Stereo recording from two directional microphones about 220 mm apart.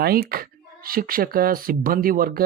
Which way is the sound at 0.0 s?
45° right (ahead or behind).